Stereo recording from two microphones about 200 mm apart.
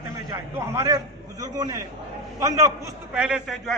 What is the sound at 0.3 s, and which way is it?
A man's voice, 15° right (ahead or behind).